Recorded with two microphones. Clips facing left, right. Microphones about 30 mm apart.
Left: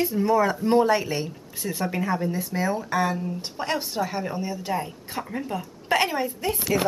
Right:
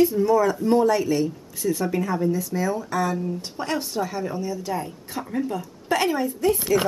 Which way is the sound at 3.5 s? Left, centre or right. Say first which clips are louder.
Even; centre.